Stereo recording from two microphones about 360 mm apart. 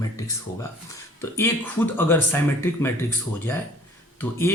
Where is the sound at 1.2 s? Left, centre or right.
Centre.